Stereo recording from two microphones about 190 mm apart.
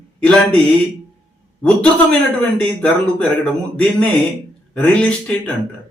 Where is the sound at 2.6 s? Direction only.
5° left (ahead or behind).